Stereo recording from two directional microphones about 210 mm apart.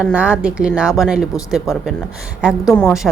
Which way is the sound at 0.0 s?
5° right (ahead or behind).